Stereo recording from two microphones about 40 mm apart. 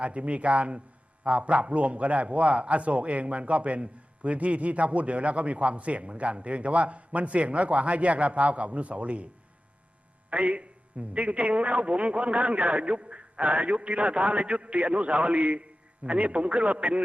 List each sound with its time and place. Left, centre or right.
0.0 s a man's voice: right
10.2 s a man's voice: right